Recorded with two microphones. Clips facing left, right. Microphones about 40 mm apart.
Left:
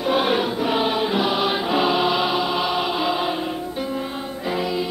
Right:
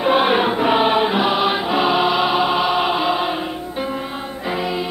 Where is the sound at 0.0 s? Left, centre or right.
Right.